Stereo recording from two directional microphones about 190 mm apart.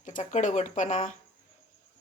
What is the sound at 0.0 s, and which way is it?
Speech, 40° left (ahead or behind).